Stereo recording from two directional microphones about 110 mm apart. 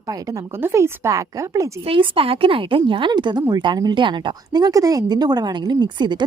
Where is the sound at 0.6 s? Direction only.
25° right (ahead or behind).